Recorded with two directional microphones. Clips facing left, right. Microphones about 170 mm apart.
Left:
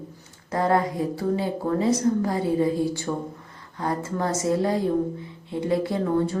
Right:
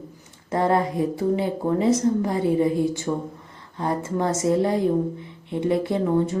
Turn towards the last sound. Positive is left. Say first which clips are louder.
# right 2 dB
turn(degrees=-20)  # may be behind; listen again after turning